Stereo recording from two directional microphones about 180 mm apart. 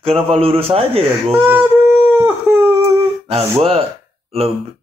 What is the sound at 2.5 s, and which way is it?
Humming, 15° right (ahead or behind).